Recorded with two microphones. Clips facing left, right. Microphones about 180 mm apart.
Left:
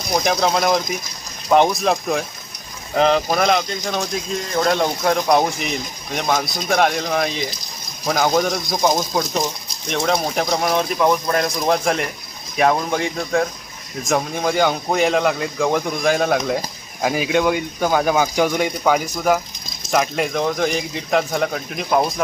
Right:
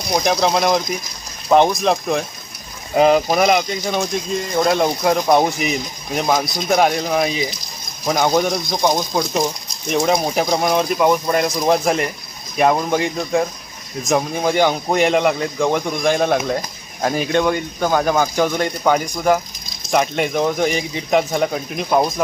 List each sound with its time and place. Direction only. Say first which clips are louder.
0.2 s speech: right 1 dB; centre (ahead or behind)